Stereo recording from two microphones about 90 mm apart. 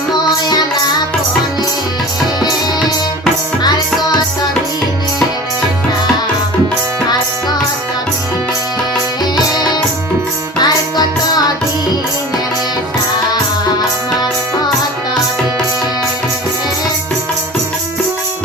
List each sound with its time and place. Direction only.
10.6 s music: 45° left (ahead or behind)